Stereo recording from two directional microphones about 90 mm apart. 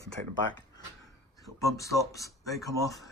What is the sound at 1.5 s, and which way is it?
Speech, 35° left (ahead or behind).